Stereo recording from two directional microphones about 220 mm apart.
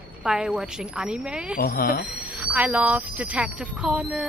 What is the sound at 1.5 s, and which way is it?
Speech, 40° left (ahead or behind).